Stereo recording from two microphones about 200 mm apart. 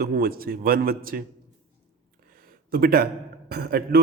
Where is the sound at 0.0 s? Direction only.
50° right (ahead or behind).